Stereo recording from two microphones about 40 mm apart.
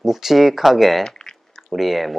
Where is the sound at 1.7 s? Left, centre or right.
Centre.